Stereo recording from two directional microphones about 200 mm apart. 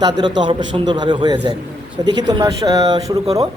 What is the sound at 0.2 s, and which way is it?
A man's voice, 20° right (ahead or behind).